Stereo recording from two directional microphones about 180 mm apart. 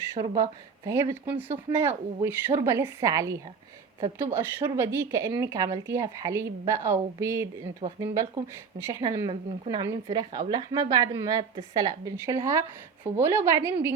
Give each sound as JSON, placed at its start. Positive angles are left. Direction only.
{"t": 0.1, "sound": "a woman's voice", "side_deg": -20}